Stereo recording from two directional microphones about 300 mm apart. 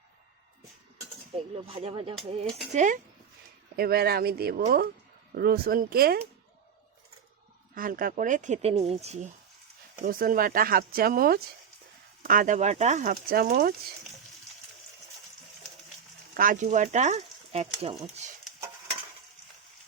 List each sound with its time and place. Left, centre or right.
1.5 s speech: centre
7.8 s speech: right
16.4 s speech: right